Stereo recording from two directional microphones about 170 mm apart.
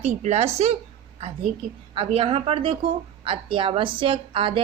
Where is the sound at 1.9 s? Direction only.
35° right (ahead or behind).